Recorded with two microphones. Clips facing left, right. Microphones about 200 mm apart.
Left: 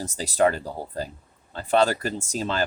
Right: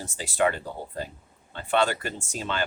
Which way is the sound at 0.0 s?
40° left (ahead or behind).